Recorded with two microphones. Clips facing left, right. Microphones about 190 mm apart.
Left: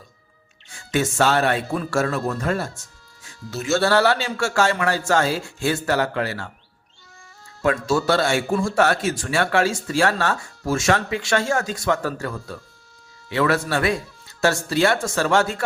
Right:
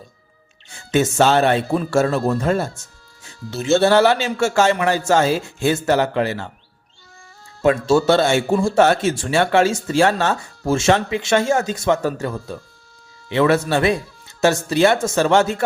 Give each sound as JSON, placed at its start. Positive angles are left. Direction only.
{"t": 0.7, "sound": "speech", "side_deg": -25}
{"t": 7.6, "sound": "speech", "side_deg": -25}